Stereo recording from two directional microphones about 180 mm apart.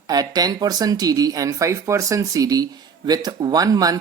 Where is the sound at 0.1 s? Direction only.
20° right (ahead or behind).